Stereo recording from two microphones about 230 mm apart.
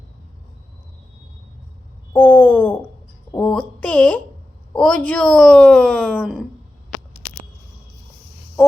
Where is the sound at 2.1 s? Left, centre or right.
Centre.